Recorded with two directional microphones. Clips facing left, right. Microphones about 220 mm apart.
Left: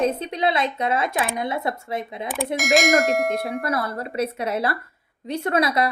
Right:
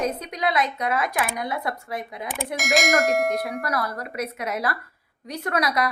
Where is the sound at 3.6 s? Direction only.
25° left (ahead or behind).